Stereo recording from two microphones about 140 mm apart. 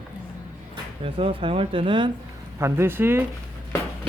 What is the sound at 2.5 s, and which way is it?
Speech, 20° right (ahead or behind).